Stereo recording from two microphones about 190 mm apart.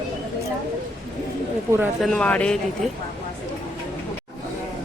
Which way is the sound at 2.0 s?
5° left (ahead or behind).